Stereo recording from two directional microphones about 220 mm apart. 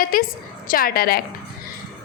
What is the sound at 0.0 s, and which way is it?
A woman's voice, 40° left (ahead or behind).